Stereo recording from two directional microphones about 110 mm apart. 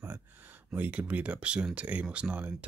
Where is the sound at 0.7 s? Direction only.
15° right (ahead or behind).